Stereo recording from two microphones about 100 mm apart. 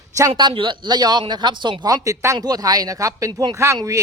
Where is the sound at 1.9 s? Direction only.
35° right (ahead or behind).